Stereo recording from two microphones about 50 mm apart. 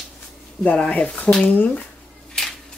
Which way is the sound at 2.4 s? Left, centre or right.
Centre.